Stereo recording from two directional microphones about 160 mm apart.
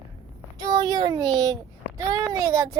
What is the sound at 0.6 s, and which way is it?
A child's voice, 25° right (ahead or behind).